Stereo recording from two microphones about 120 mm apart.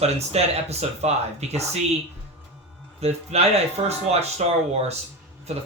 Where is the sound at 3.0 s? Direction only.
60° right (ahead or behind).